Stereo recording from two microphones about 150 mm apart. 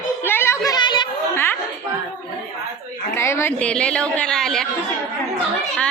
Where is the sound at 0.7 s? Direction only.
30° left (ahead or behind).